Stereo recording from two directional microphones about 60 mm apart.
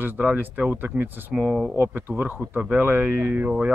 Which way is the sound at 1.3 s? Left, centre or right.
Centre.